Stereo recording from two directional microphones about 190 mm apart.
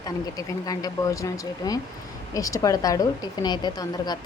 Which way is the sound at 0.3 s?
20° left (ahead or behind).